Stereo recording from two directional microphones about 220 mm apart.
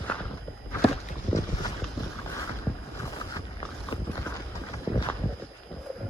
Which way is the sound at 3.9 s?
20° left (ahead or behind).